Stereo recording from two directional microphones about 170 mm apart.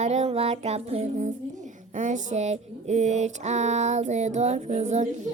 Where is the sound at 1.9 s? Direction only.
45° right (ahead or behind).